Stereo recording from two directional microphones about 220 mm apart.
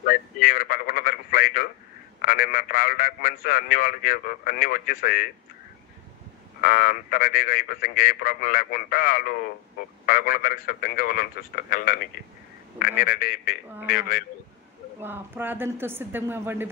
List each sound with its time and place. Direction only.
0.0 s a sound: 40° left (ahead or behind)
2.2 s a man's voice: 40° left (ahead or behind)
6.6 s a man's voice: 40° left (ahead or behind)
15.0 s speech: 10° right (ahead or behind)